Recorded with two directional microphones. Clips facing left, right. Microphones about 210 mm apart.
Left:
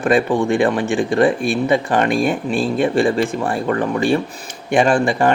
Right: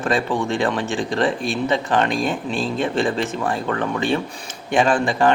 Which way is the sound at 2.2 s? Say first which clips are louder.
Left 5 dB; 10° left (ahead or behind).